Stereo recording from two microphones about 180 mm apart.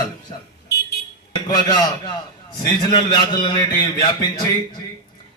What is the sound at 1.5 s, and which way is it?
A man's voice, 20° left (ahead or behind).